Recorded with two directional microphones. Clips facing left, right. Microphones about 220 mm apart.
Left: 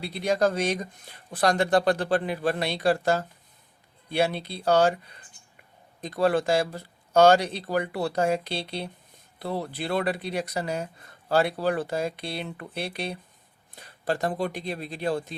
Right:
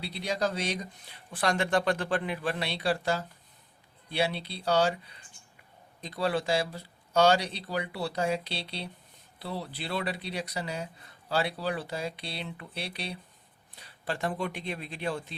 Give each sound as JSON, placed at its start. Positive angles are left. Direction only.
{"t": 0.0, "sound": "speech", "side_deg": 50}
{"t": 6.0, "sound": "speech", "side_deg": 50}